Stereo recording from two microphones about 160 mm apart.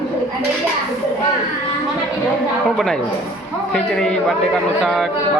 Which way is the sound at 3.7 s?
5° left (ahead or behind).